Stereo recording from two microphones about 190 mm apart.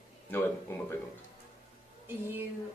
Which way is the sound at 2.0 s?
10° right (ahead or behind).